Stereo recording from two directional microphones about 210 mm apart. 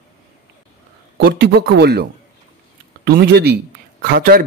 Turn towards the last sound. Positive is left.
turn(degrees=-45)  # may be behind; listen again after turning